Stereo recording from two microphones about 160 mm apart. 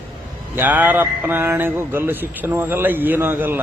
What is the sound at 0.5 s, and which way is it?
Speech, 10° right (ahead or behind).